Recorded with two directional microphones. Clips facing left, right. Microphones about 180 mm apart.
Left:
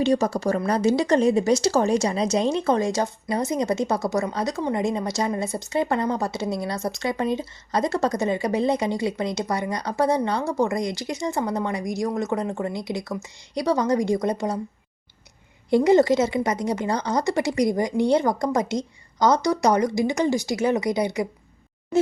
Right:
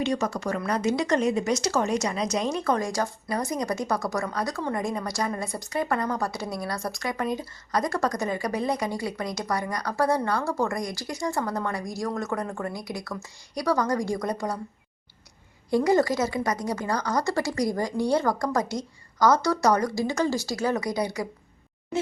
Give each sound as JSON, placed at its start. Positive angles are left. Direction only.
{"t": 0.0, "sound": "speech", "side_deg": 30}
{"t": 15.7, "sound": "speech", "side_deg": 25}